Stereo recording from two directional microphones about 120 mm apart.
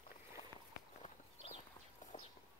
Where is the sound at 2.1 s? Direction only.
90° left.